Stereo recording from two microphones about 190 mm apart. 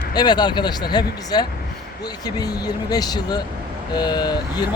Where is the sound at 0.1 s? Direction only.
20° left (ahead or behind).